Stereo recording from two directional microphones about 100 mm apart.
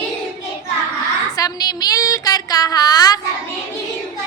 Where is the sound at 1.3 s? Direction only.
40° left (ahead or behind).